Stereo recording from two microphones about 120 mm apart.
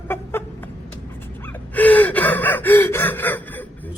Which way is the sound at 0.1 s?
20° left (ahead or behind).